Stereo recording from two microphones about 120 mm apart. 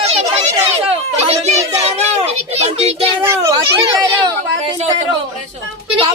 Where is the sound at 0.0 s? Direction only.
60° right (ahead or behind).